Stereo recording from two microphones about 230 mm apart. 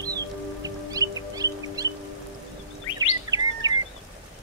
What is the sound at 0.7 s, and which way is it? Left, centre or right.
Music, centre.